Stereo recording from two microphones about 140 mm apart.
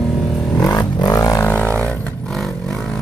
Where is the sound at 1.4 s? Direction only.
10° left (ahead or behind).